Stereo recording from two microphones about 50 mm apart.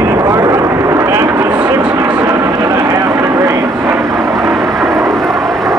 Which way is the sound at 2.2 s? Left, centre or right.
Right.